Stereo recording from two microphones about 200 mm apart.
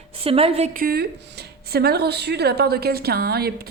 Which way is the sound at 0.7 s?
50° right (ahead or behind).